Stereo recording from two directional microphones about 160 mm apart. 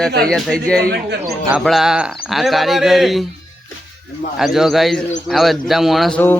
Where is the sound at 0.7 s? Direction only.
80° right.